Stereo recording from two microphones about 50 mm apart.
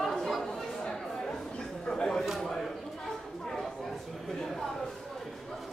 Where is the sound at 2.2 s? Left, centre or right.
Centre.